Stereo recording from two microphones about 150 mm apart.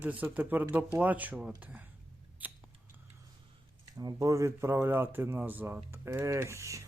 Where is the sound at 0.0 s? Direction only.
10° right (ahead or behind).